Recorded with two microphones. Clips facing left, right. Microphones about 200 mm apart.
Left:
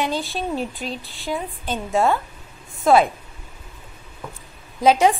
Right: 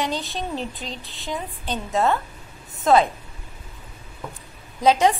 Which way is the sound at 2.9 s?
5° left (ahead or behind).